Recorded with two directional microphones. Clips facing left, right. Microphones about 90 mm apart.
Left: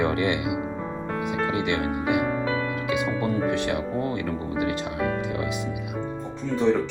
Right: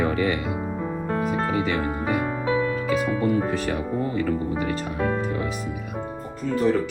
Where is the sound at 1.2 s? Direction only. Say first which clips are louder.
Right 1 dB; 35° right (ahead or behind).